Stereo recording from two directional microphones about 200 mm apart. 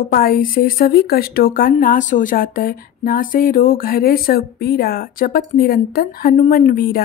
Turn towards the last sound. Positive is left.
turn(degrees=45)  # may be behind; listen again after turning